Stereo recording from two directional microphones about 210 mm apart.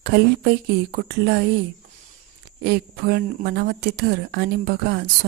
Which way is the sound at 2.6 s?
50° right (ahead or behind).